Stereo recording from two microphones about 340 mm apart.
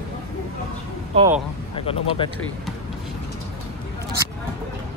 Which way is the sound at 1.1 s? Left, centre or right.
Centre.